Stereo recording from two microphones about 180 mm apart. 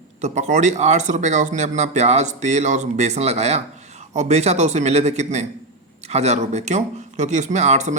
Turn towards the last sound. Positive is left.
turn(degrees=-40)  # may be behind; listen again after turning